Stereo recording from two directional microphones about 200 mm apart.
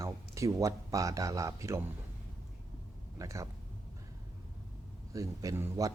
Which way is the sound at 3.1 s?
15° right (ahead or behind).